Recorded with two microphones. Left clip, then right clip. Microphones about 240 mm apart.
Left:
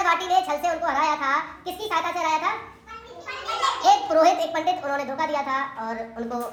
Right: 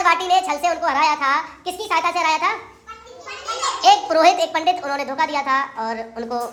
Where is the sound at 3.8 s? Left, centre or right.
Right.